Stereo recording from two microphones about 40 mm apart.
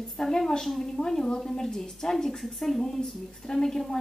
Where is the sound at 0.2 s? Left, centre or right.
Centre.